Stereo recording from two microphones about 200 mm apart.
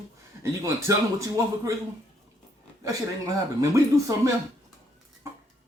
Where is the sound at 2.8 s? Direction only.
15° right (ahead or behind).